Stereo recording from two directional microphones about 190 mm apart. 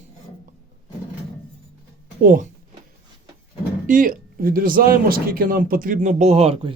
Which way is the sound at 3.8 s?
45° right (ahead or behind).